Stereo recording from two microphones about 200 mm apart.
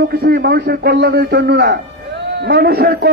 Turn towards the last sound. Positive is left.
turn(degrees=-50)  # may be behind; listen again after turning